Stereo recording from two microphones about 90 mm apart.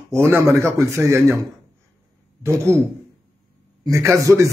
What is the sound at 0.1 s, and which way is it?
A man's voice, 30° right (ahead or behind).